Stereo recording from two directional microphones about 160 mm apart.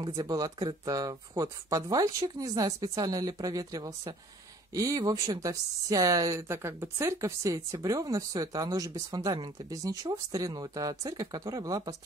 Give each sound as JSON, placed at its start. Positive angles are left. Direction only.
{"t": 0.0, "sound": "speech", "side_deg": -20}